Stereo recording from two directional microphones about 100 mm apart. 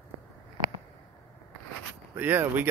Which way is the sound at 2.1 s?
20° right (ahead or behind).